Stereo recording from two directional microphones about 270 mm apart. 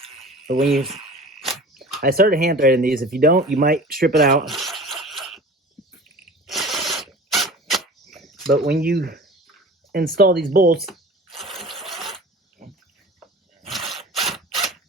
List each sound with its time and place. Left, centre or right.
0.0 s a sound: right
1.4 s biting: centre
2.0 s speech: right
4.4 s rub: centre
5.0 s wheeze: centre
6.4 s a sound: centre
8.4 s speech: right
10.8 s sewing machine: centre
13.7 s a sound: centre